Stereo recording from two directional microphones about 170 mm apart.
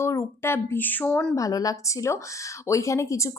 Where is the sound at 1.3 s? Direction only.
20° left (ahead or behind).